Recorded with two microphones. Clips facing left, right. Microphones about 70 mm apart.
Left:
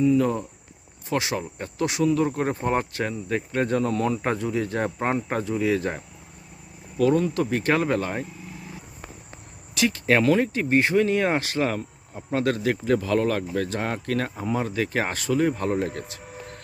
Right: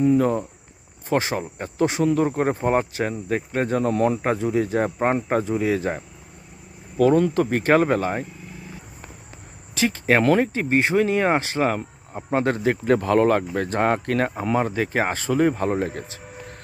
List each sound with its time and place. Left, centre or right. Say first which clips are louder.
0.0 s speech: right 2 dB; right; by 3.8 s centre
3.8 s speech: right 3 dB; right
4.6 s speech: right 4 dB; centre
7.3 s speech: right 5 dB; right
7.9 s speech: right 3 dB; centre
10.4 s speech: right 1 dB; centre
12.8 s speech: right 5 dB; right
14.6 s speech: right 3 dB; right